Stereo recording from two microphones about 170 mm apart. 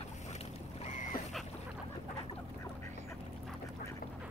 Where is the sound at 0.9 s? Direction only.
50° left (ahead or behind).